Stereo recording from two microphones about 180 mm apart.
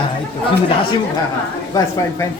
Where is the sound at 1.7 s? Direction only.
15° left (ahead or behind).